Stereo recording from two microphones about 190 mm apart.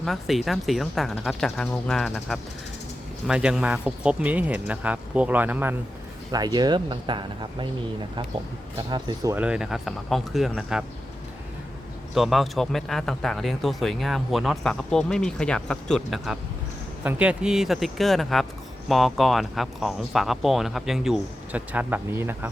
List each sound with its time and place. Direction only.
0.0 s speech: centre (ahead or behind)
6.3 s speech: 20° right (ahead or behind)
8.9 s speech: 20° right (ahead or behind)
9.3 s speech: 5° right (ahead or behind)
12.1 s speech: centre (ahead or behind)